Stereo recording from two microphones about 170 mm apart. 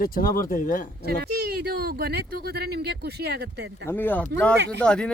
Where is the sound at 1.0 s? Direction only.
70° right (ahead or behind).